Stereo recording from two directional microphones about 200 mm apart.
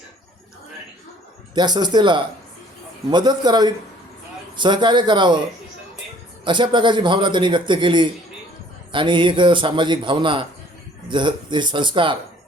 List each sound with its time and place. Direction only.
1.5 s a man's voice: 20° right (ahead or behind)
6.4 s a man's voice: 25° right (ahead or behind)